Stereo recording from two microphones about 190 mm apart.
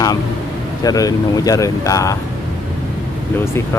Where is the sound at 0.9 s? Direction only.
20° left (ahead or behind).